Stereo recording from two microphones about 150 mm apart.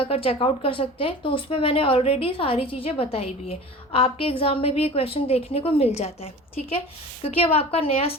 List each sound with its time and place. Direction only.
0.0 s speech: 40° left (ahead or behind)